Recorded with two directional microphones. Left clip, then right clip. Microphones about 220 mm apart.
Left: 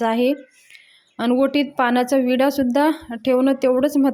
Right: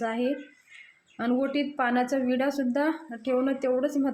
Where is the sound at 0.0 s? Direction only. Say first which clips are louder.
Left 10 dB; 40° left (ahead or behind).